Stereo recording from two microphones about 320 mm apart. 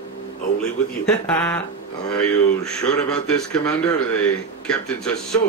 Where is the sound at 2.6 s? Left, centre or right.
Centre.